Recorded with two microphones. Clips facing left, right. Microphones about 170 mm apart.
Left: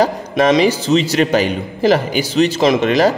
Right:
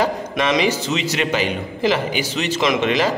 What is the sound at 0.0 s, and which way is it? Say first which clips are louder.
A man's voice: left 6 dB; 35° left (ahead or behind).